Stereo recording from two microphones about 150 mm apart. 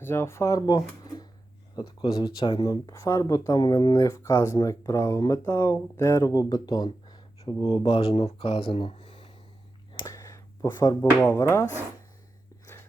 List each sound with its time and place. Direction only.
0.0 s speech: 15° left (ahead or behind); by 9.3 s 35° left (ahead or behind)
10.1 s a sound: 20° left (ahead or behind)
11.3 s speech: 15° left (ahead or behind)